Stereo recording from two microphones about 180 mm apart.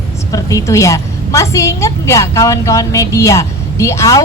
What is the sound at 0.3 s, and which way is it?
A woman's voice, 20° left (ahead or behind).